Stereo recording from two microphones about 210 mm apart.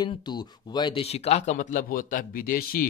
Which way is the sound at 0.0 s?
20° left (ahead or behind).